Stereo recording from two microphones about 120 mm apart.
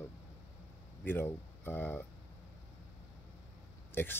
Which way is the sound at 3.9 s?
20° left (ahead or behind).